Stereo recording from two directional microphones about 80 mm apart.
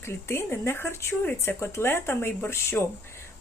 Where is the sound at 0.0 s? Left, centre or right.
Left.